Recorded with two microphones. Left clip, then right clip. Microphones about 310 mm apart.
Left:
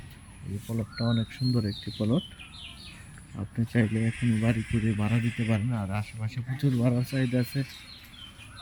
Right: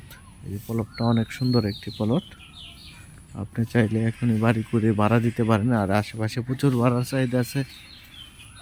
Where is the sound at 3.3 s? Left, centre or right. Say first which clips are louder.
Right 5 dB; centre.